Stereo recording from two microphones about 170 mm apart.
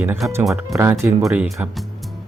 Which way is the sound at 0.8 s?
15° right (ahead or behind).